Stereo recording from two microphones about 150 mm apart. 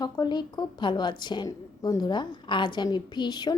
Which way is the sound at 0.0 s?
25° left (ahead or behind).